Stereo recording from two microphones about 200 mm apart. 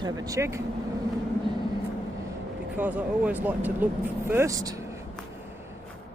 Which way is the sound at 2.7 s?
10° right (ahead or behind).